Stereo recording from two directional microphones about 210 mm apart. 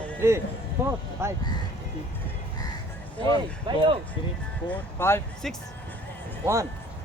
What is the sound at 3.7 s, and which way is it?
Speech, 25° right (ahead or behind).